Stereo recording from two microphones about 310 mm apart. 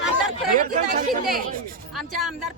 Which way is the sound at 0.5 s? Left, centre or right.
Right.